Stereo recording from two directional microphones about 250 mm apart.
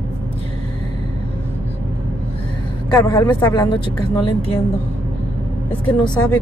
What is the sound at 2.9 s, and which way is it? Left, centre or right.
Speech, centre.